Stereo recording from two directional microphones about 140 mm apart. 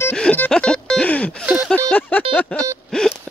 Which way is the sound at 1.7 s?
10° left (ahead or behind).